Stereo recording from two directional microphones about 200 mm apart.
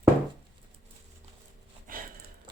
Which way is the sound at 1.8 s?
45° right (ahead or behind).